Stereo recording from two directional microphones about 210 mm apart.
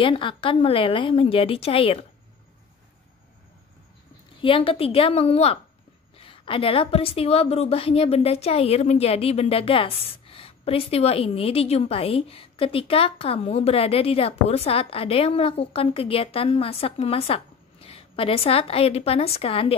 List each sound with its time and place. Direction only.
0.0 s a woman's voice: 25° left (ahead or behind)
4.4 s a woman's voice: 25° left (ahead or behind)